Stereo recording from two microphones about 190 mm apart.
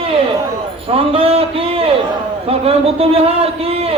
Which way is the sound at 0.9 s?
30° right (ahead or behind).